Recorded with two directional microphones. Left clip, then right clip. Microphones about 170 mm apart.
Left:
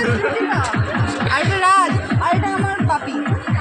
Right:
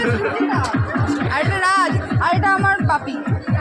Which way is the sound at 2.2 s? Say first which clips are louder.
Right 4 dB; 35° left (ahead or behind).